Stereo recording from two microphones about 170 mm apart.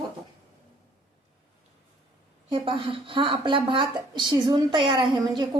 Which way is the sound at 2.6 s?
30° right (ahead or behind).